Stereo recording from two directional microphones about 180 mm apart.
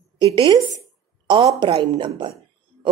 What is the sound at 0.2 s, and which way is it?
A woman's voice, 30° right (ahead or behind).